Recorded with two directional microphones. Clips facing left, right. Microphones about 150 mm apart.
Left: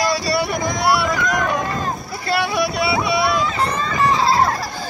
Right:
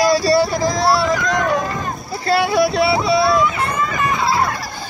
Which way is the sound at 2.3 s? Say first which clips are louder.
Right 5 dB; 25° right (ahead or behind).